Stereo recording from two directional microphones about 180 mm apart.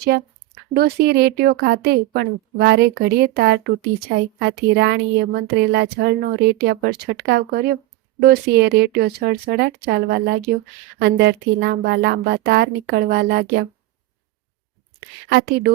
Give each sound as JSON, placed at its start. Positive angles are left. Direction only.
{"t": 0.1, "sound": "speech", "side_deg": -60}
{"t": 15.3, "sound": "speech", "side_deg": -60}